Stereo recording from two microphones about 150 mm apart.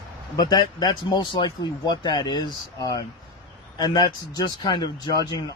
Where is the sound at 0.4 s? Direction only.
25° left (ahead or behind).